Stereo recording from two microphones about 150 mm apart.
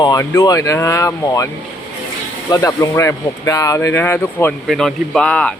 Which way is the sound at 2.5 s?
20° left (ahead or behind).